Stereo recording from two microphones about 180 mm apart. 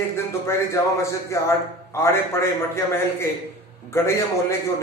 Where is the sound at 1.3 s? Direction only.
15° left (ahead or behind).